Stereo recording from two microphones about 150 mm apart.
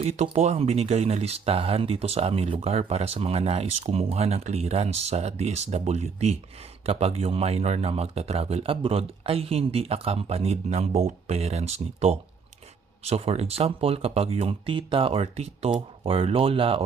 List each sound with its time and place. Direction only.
0.0 s speech: 45° right (ahead or behind)